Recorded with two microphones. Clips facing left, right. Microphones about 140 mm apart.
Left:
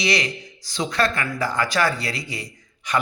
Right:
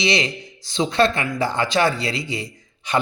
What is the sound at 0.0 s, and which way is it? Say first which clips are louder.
Speech: right 2 dB; 25° right (ahead or behind).